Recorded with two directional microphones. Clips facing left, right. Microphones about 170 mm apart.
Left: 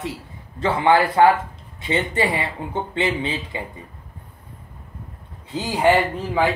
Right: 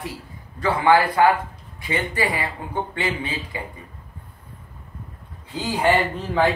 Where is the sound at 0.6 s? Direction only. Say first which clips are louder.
Even; 25° left (ahead or behind).